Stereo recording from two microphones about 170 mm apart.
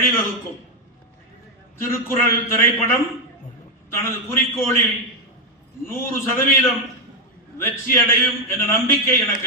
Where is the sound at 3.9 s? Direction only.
15° left (ahead or behind).